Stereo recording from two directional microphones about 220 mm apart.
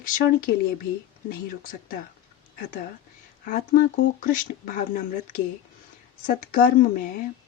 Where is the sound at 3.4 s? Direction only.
35° left (ahead or behind).